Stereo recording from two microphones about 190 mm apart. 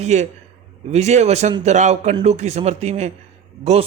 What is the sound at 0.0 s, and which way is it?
Speech, 35° right (ahead or behind).